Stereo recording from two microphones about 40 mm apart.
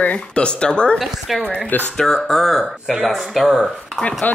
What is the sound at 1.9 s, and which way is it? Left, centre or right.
Speech, centre.